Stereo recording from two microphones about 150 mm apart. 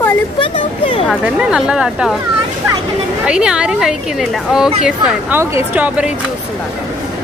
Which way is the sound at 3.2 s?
5° right (ahead or behind).